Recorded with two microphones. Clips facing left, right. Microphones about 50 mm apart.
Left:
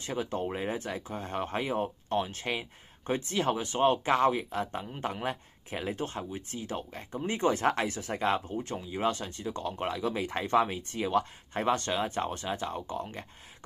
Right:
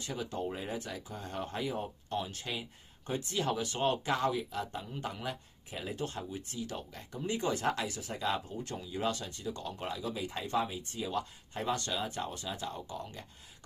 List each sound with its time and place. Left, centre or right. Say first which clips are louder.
0.0 s speech: left 4 dB; left